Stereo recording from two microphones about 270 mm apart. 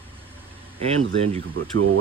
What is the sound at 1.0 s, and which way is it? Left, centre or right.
Speech, right.